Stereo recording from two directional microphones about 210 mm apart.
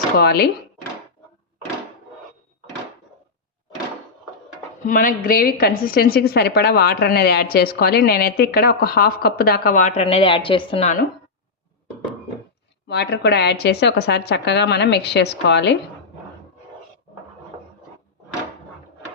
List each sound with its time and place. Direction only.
0.2 s a woman's voice: 50° left (ahead or behind)
4.8 s a woman's voice: 40° left (ahead or behind)
12.9 s a woman's voice: 50° left (ahead or behind)